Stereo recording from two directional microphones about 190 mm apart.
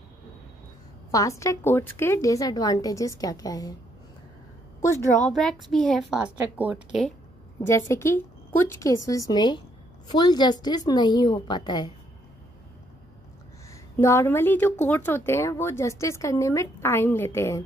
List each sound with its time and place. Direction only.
1.1 s speech: 15° left (ahead or behind)
4.7 s a woman's voice: 15° left (ahead or behind)
5.3 s a woman's voice: centre (ahead or behind)
7.6 s a woman's voice: 15° left (ahead or behind)
13.9 s speech: 15° left (ahead or behind)